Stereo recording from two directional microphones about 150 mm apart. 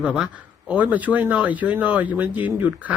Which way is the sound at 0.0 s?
5° right (ahead or behind).